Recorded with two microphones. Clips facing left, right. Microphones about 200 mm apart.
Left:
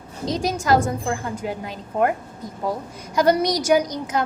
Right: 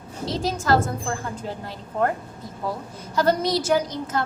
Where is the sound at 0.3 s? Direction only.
15° left (ahead or behind).